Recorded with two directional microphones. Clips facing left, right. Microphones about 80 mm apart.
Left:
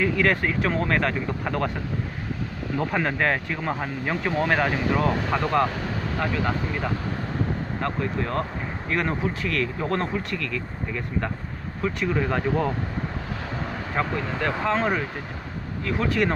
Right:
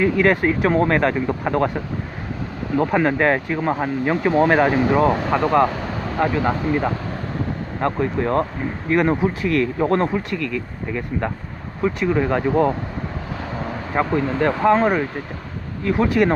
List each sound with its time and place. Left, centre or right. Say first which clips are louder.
0.0 s speech: right 5 dB; centre
6.2 s speech: right 7 dB; right
7.8 s speech: right 8 dB; centre
14.1 s speech: right 7 dB; right
14.6 s speech: right 8 dB; centre